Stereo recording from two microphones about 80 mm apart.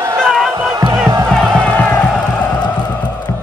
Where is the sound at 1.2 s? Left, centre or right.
Centre.